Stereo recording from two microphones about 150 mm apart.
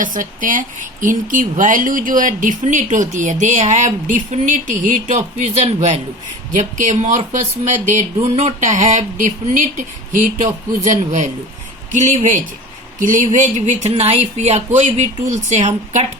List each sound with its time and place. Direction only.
0.0 s speech: 60° right (ahead or behind)
8.2 s speech: 45° right (ahead or behind)